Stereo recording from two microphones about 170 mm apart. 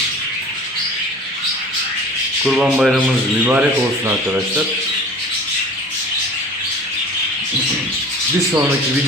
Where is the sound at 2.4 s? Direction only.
5° right (ahead or behind).